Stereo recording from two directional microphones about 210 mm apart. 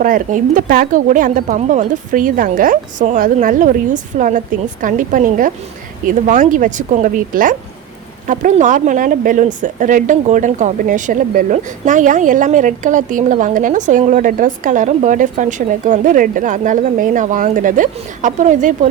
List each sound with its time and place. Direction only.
0.0 s speech: 40° right (ahead or behind)